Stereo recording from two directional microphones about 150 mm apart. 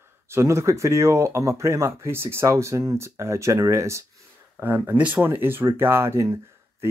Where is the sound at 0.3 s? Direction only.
20° right (ahead or behind).